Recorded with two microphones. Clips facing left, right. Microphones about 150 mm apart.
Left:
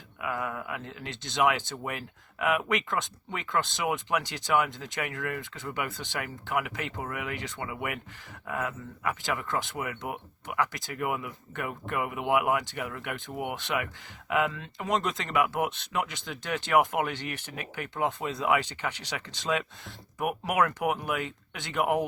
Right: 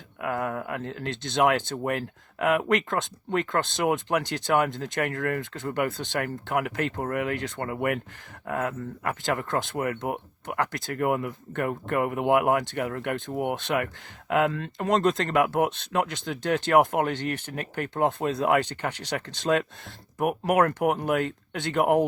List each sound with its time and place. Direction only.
0.2 s speech: 55° right (ahead or behind)
13.3 s speech: 45° right (ahead or behind)
20.1 s speech: 45° right (ahead or behind)